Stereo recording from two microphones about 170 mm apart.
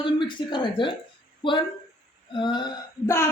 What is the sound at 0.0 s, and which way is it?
A woman's voice, 30° left (ahead or behind).